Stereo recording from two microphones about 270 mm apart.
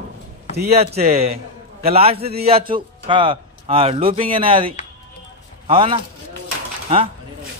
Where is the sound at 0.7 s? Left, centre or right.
Right.